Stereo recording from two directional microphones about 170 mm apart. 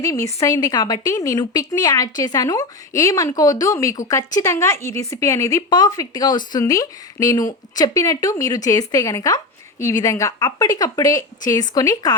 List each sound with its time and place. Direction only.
0.0 s speech: 20° left (ahead or behind)